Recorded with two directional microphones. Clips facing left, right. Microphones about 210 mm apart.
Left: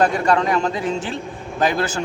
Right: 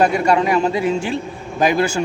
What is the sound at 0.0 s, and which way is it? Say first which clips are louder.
A man's voice: right 2 dB; 10° right (ahead or behind).